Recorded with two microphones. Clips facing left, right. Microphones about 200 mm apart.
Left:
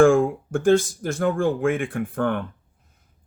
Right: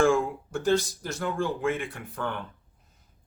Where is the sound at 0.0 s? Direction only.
50° left (ahead or behind).